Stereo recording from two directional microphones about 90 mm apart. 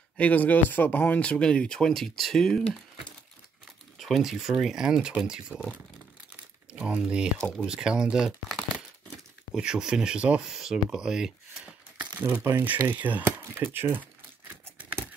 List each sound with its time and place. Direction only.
0.2 s speech: 20° left (ahead or behind)
4.0 s speech: centre (ahead or behind)
6.7 s a sound: 15° right (ahead or behind)
7.0 s speech: 10° right (ahead or behind)